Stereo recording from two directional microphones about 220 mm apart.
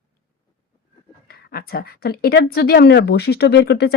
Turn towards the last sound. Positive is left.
turn(degrees=45)  # may be behind; listen again after turning